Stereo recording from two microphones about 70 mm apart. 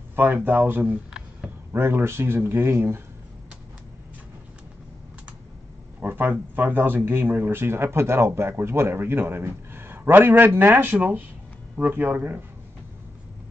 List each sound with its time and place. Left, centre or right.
0.1 s speech: right
5.9 s speech: right